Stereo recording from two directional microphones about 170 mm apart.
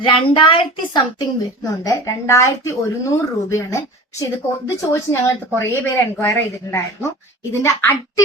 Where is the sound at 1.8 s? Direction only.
15° left (ahead or behind).